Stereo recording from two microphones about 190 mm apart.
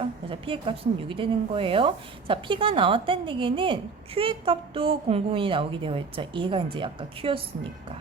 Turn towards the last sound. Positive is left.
turn(degrees=-30)  # may be behind; listen again after turning